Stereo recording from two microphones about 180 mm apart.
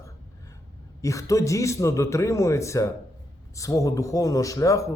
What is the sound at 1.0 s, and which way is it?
A man's voice, 15° left (ahead or behind).